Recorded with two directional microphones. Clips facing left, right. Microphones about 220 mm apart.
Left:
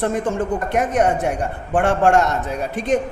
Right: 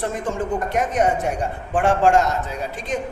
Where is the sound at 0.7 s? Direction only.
60° left (ahead or behind).